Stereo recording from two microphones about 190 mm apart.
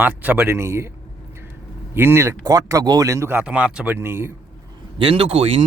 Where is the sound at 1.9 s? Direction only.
10° right (ahead or behind).